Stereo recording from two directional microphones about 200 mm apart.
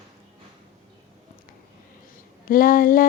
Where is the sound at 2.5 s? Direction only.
45° left (ahead or behind).